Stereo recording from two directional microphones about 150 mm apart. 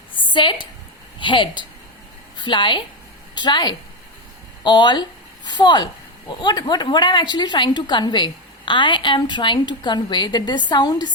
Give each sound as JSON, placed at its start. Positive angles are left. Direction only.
{"t": 0.3, "sound": "a woman's voice", "side_deg": 30}